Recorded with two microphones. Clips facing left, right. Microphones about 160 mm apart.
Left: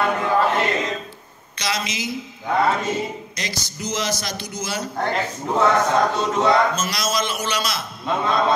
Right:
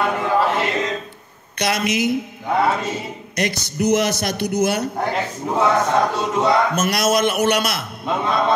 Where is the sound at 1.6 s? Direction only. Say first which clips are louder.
Right 7 dB; 60° right (ahead or behind).